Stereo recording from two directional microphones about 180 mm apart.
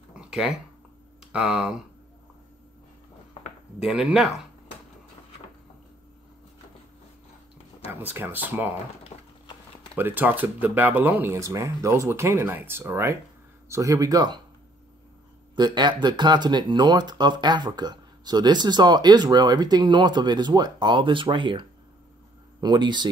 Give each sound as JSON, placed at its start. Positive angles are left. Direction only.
{"t": 0.1, "sound": "a sound", "side_deg": -5}
{"t": 1.3, "sound": "speech", "side_deg": -5}
{"t": 3.8, "sound": "speech", "side_deg": -5}
{"t": 8.0, "sound": "speech", "side_deg": -10}
{"t": 9.1, "sound": "a sound", "side_deg": 35}
{"t": 9.9, "sound": "speech", "side_deg": -10}
{"t": 15.5, "sound": "speech", "side_deg": -25}